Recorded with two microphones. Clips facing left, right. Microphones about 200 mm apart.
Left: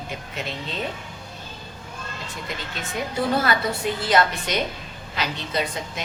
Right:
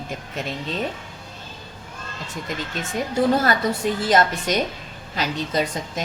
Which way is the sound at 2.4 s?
45° right (ahead or behind).